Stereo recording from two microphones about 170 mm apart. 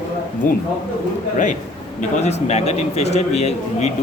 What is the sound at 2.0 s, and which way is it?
A man's voice, 40° left (ahead or behind).